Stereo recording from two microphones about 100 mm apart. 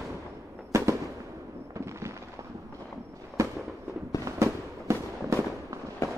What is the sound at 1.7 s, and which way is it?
Fireworks, 30° right (ahead or behind).